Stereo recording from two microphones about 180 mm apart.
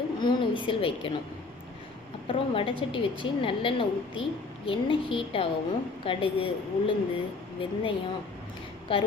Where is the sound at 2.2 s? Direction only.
30° left (ahead or behind).